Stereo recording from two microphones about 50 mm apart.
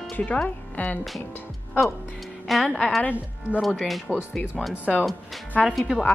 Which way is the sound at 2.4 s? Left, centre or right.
Centre.